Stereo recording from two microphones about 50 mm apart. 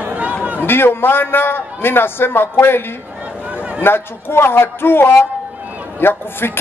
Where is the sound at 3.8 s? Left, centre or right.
Left.